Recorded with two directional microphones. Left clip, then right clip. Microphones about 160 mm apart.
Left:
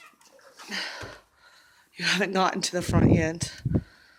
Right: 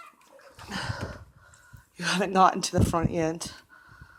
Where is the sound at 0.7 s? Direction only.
5° left (ahead or behind).